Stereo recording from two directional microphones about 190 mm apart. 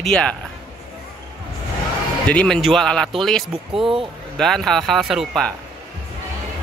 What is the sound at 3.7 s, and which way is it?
Speech, 30° right (ahead or behind).